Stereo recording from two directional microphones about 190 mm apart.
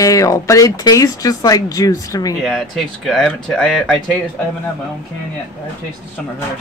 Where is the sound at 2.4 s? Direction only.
Centre (ahead or behind).